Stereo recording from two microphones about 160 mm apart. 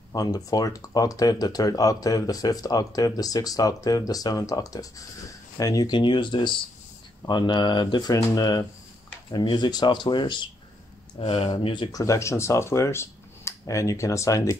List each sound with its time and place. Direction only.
0.1 s speech: 25° left (ahead or behind)